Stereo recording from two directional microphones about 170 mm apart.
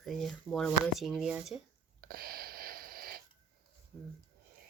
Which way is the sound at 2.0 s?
60° right (ahead or behind).